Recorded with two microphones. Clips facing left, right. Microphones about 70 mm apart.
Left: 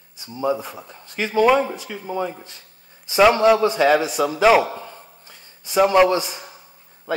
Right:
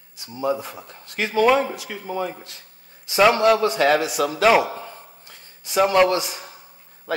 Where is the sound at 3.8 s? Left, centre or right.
Centre.